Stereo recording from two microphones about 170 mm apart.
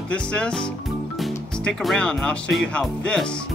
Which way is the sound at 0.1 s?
5° left (ahead or behind).